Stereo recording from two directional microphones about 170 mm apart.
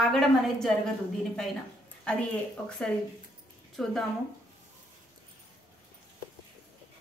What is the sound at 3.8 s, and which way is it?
Speech, centre (ahead or behind).